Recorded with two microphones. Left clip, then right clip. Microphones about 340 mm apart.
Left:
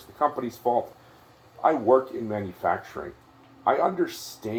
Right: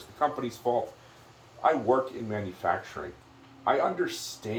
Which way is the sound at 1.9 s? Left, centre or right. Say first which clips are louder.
Left 5 dB; left.